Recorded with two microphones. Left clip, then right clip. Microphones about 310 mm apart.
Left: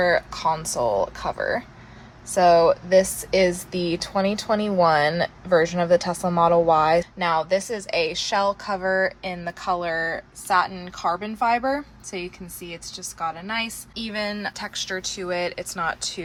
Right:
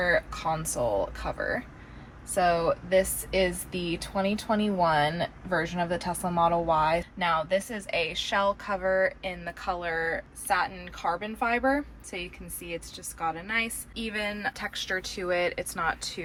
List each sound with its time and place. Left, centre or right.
0.0 s a woman's voice: centre